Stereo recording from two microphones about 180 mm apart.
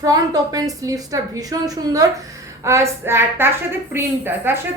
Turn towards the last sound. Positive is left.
turn(degrees=-10)  # may be behind; listen again after turning